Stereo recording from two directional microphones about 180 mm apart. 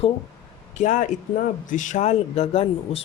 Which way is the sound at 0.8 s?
45° left (ahead or behind).